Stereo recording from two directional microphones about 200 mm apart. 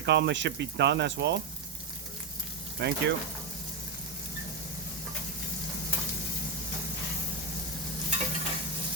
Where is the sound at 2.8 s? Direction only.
60° right (ahead or behind).